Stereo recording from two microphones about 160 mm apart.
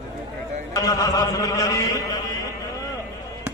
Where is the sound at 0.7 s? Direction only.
20° left (ahead or behind).